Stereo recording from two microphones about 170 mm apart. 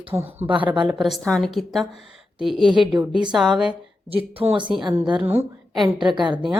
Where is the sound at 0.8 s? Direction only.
5° right (ahead or behind).